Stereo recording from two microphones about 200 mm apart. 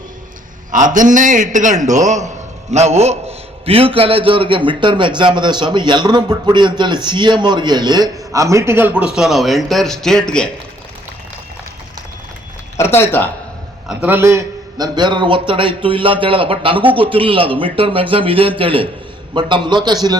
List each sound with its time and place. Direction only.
0.7 s a man's voice: 40° right (ahead or behind); by 10.5 s 5° left (ahead or behind)
12.7 s speech: 10° left (ahead or behind)
13.8 s a man's voice: 10° right (ahead or behind)